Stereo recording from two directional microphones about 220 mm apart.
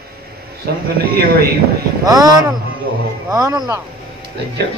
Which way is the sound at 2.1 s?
15° right (ahead or behind).